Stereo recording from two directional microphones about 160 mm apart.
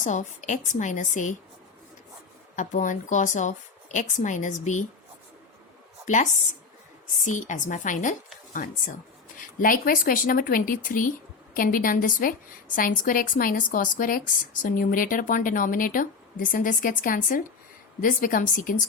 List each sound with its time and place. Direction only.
0.0 s a woman's voice: 50° left (ahead or behind)
2.6 s a woman's voice: 50° left (ahead or behind)
6.1 s a woman's voice: 50° left (ahead or behind)
9.6 s a woman's voice: 60° left (ahead or behind)